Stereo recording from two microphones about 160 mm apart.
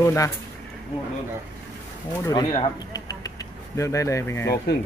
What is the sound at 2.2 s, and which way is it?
Speech, 25° left (ahead or behind).